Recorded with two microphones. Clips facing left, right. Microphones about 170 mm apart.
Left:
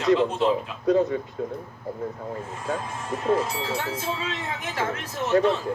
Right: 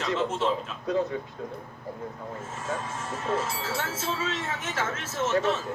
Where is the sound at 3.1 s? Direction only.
15° left (ahead or behind).